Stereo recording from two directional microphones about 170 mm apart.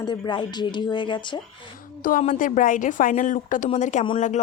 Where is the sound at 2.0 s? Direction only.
50° left (ahead or behind).